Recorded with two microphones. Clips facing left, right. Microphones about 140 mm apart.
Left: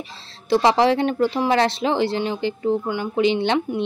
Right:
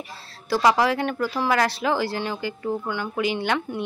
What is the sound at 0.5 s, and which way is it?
A woman's voice, 25° left (ahead or behind).